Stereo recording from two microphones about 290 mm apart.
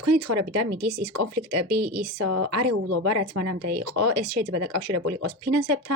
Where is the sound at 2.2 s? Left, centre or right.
Right.